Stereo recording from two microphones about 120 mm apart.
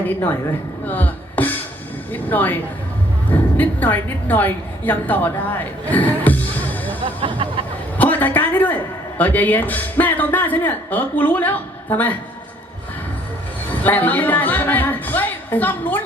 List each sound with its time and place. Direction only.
0.0 s a woman's voice: 15° left (ahead or behind)
0.9 s music: 15° left (ahead or behind)
2.1 s a woman's voice: 15° left (ahead or behind)
3.6 s a woman's voice: 15° left (ahead or behind)
7.0 s music: 45° right (ahead or behind)
7.9 s a man's voice: 15° left (ahead or behind)
13.8 s a woman's voice: 15° left (ahead or behind)